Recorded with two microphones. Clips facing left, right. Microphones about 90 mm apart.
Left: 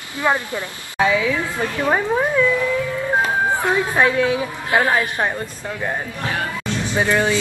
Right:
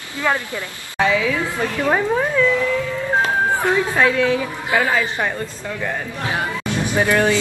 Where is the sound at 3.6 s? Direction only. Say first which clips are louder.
Even; 15° left (ahead or behind).